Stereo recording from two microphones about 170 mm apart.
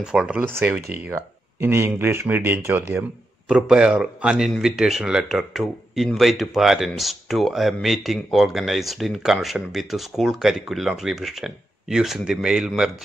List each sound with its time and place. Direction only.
0.0 s a man's voice: 5° right (ahead or behind)